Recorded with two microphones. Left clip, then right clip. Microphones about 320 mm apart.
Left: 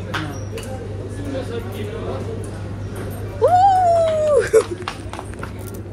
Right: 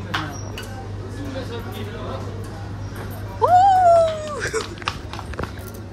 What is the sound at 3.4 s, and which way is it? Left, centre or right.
Music, centre.